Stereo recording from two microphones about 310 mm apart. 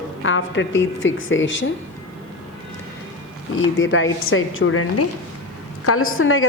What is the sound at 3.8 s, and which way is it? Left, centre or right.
A woman's voice, left.